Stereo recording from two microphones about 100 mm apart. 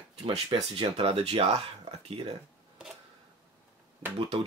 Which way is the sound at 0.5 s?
55° right (ahead or behind).